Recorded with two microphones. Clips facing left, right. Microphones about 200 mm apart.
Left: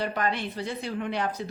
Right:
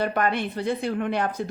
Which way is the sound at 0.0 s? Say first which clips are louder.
Right 4 dB; 55° right (ahead or behind).